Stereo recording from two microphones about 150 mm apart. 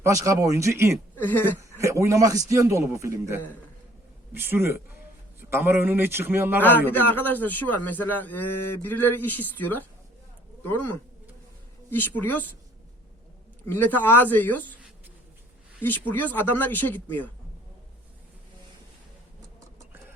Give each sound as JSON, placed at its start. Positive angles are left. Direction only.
{"t": 0.0, "sound": "a man's voice", "side_deg": -20}
{"t": 1.2, "sound": "a man's voice", "side_deg": 10}
{"t": 1.8, "sound": "a man's voice", "side_deg": -20}
{"t": 6.6, "sound": "a man's voice", "side_deg": 15}
{"t": 13.7, "sound": "a man's voice", "side_deg": 15}
{"t": 15.8, "sound": "a man's voice", "side_deg": 15}